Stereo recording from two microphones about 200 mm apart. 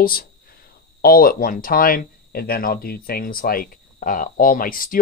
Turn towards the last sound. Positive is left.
turn(degrees=45)  # may be behind; listen again after turning